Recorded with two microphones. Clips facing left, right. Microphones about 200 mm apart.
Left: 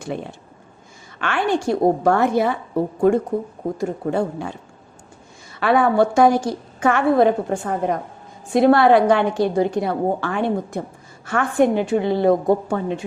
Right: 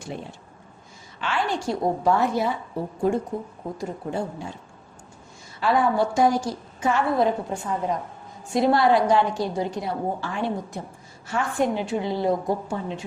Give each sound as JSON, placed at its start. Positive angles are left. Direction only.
{"t": 0.1, "sound": "a woman's voice", "side_deg": 60}
{"t": 5.5, "sound": "a woman's voice", "side_deg": 65}